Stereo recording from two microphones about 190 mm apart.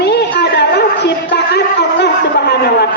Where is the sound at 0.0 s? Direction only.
60° left (ahead or behind).